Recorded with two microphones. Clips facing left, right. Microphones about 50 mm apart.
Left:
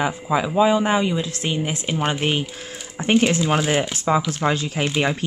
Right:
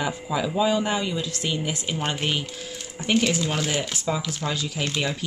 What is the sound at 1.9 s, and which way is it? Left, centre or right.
Speech, centre.